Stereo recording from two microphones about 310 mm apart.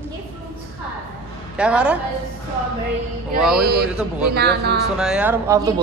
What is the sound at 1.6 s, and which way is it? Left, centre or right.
Speech, centre.